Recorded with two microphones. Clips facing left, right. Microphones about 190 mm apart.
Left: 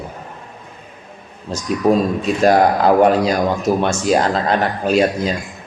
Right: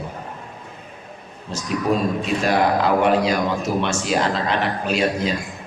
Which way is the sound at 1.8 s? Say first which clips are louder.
Left 6 dB; 40° left (ahead or behind).